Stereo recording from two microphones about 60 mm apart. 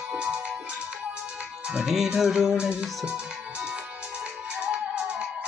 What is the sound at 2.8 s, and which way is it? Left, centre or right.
Speech, centre.